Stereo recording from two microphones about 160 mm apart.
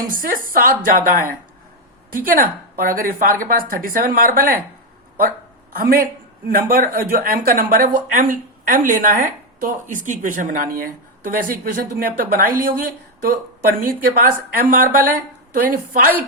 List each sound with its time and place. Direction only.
0.1 s a woman's voice: 60° right (ahead or behind)
2.2 s a woman's voice: 65° right (ahead or behind)
5.7 s a woman's voice: 65° right (ahead or behind)